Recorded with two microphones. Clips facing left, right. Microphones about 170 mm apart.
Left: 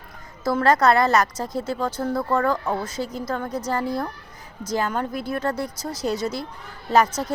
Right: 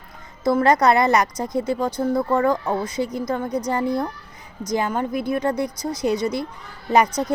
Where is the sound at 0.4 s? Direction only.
15° right (ahead or behind).